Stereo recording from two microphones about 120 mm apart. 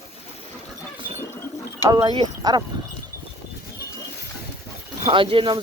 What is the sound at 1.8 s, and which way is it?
Speech, 30° right (ahead or behind).